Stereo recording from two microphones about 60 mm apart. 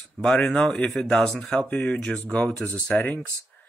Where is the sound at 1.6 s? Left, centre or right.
Left.